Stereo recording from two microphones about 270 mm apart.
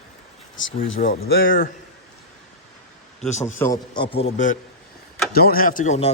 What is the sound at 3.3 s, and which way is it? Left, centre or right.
Speech, left.